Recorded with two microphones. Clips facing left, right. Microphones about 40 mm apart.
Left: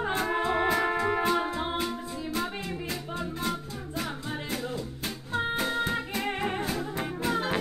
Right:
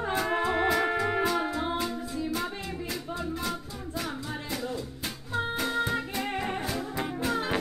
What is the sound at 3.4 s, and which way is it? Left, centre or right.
Music, centre.